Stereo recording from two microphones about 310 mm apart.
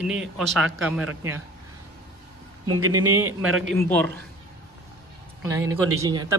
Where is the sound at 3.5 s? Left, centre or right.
Right.